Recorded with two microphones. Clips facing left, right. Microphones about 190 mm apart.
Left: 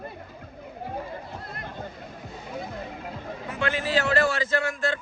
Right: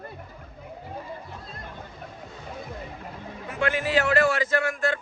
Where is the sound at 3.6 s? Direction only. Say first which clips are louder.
Right 2 dB; 30° left (ahead or behind).